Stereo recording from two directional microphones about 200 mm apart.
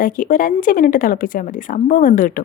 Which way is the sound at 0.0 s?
45° left (ahead or behind).